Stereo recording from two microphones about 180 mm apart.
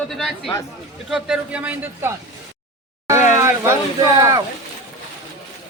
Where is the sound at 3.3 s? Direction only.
15° right (ahead or behind).